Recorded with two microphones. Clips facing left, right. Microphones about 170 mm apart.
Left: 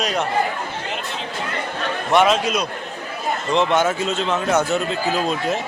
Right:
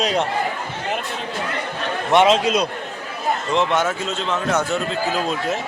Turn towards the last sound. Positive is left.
turn(degrees=5)  # may be behind; listen again after turning